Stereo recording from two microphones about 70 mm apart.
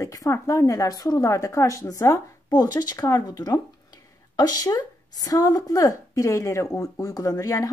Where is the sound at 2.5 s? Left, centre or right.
Left.